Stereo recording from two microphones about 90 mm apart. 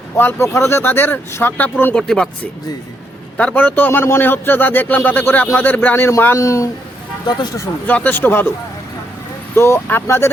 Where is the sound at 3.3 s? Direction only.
20° left (ahead or behind); by 6.7 s 35° left (ahead or behind).